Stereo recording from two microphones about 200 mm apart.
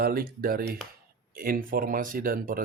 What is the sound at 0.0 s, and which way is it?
Speech, 45° right (ahead or behind).